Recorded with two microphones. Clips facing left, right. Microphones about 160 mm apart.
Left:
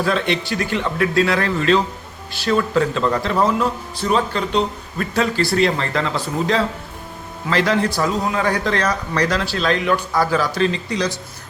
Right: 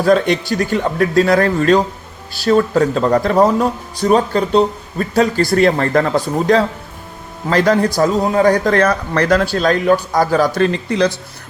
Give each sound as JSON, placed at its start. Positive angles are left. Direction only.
{"t": 0.0, "sound": "speech", "side_deg": -40}